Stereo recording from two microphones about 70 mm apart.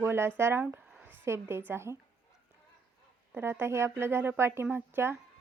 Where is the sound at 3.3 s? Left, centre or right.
Right.